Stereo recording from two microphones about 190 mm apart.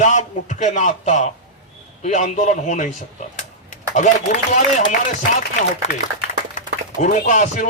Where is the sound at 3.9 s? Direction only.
40° left (ahead or behind).